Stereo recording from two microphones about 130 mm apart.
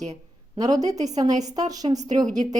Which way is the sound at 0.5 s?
30° right (ahead or behind).